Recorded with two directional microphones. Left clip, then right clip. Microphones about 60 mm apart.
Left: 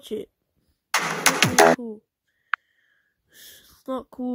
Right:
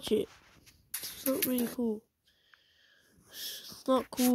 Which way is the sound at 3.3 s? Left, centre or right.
Left.